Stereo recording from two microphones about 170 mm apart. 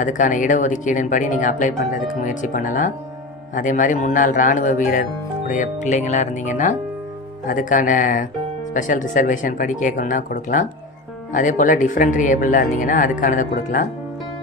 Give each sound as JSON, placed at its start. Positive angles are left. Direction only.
{"t": 0.0, "sound": "speech", "side_deg": 50}